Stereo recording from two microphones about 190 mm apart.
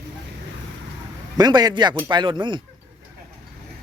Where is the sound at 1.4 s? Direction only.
20° right (ahead or behind).